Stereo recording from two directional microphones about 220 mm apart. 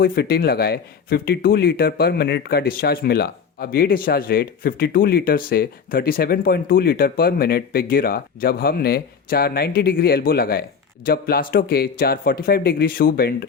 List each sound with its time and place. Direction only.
0.0 s speech: 45° left (ahead or behind)